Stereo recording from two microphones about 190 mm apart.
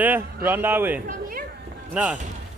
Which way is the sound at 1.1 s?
50° right (ahead or behind).